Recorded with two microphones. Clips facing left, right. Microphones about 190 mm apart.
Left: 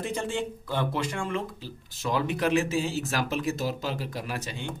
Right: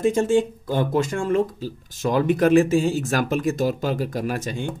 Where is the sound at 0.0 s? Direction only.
45° right (ahead or behind).